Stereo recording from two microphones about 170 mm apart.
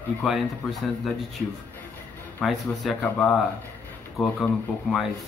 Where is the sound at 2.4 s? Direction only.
Centre (ahead or behind).